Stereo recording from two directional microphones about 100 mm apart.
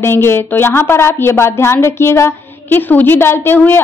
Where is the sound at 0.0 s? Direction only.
25° left (ahead or behind).